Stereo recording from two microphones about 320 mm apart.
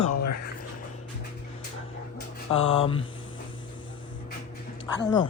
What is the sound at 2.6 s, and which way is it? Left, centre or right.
Speech, centre.